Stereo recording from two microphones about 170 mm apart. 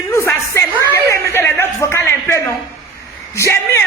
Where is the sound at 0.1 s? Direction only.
15° left (ahead or behind).